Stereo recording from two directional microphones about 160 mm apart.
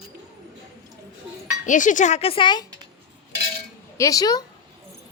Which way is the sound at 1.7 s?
50° left (ahead or behind).